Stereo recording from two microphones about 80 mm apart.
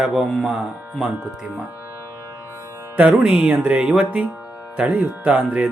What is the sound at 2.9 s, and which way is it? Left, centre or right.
Speech, centre.